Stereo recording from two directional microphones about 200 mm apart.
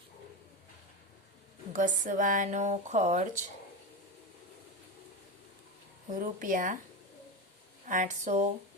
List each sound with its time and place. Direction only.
1.7 s speech: 40° right (ahead or behind)
6.1 s speech: 40° right (ahead or behind)
7.9 s speech: 40° right (ahead or behind)